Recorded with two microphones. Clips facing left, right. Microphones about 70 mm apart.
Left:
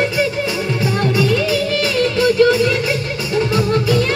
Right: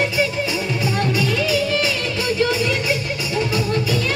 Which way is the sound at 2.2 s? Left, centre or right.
Left.